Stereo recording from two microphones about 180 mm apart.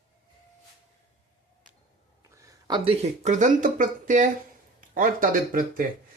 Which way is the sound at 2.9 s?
40° right (ahead or behind).